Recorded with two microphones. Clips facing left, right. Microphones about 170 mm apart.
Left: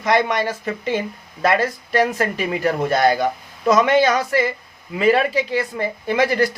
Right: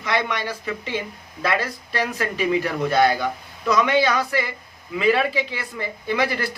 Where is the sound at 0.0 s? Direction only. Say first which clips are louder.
Left 6 dB; 45° left (ahead or behind).